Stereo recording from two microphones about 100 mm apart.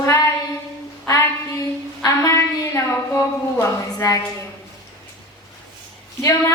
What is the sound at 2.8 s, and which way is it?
Speech, 25° left (ahead or behind).